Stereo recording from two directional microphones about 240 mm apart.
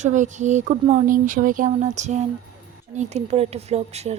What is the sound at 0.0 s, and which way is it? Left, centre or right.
Speech, right.